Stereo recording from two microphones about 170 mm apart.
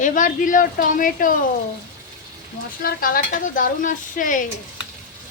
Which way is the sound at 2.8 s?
55° left (ahead or behind).